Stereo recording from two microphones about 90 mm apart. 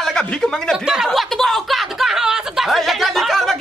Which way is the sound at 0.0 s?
5° left (ahead or behind).